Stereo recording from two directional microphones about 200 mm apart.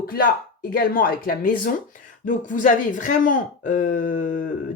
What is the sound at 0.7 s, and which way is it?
Speech, 45° left (ahead or behind).